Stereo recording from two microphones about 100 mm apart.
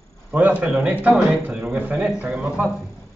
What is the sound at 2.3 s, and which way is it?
Speech, centre (ahead or behind).